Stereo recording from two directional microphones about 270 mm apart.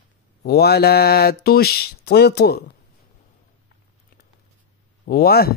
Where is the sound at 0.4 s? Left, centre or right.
Left.